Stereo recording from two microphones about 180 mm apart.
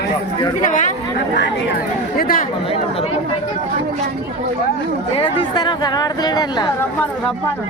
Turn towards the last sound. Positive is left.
turn(degrees=25)  # may be behind; listen again after turning